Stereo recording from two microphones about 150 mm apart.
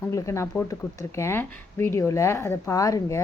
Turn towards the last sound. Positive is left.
turn(degrees=20)  # may be behind; listen again after turning